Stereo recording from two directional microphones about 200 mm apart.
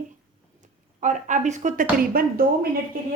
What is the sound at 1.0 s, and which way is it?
Speech, 40° right (ahead or behind).